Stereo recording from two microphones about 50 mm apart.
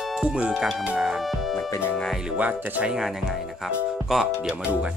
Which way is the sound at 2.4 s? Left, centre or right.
Right.